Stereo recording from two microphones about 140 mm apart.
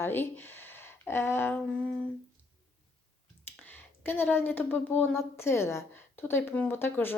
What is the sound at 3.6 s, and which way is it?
A woman's voice, 15° left (ahead or behind).